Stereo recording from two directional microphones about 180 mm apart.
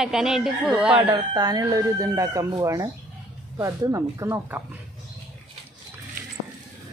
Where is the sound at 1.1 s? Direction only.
20° right (ahead or behind).